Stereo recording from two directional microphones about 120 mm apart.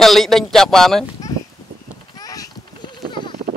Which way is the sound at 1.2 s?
30° left (ahead or behind).